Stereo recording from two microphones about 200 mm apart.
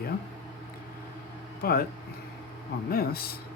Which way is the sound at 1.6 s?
50° left (ahead or behind).